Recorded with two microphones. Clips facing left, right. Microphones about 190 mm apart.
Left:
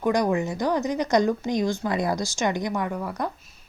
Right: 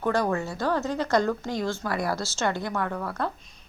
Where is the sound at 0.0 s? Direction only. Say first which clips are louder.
Left 3 dB; 15° left (ahead or behind).